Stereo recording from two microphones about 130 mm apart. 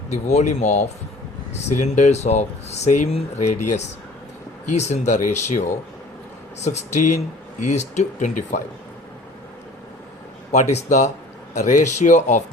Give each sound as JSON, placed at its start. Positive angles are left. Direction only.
{"t": 0.1, "sound": "speech", "side_deg": 60}
{"t": 6.7, "sound": "speech", "side_deg": 60}
{"t": 10.5, "sound": "speech", "side_deg": 60}